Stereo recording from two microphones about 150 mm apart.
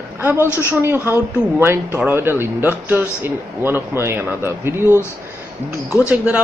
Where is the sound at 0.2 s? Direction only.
10° right (ahead or behind).